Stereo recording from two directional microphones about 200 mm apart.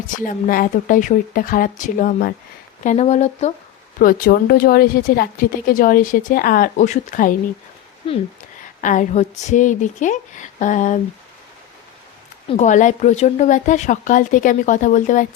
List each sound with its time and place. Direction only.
0.3 s speech: 45° left (ahead or behind)
4.0 s speech: 50° left (ahead or behind)
8.8 s speech: 40° left (ahead or behind)
12.5 s speech: 35° left (ahead or behind)